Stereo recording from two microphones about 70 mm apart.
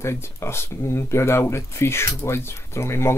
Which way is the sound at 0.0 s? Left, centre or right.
Left.